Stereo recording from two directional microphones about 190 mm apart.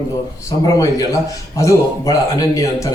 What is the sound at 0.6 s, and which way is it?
A man's voice, 20° left (ahead or behind).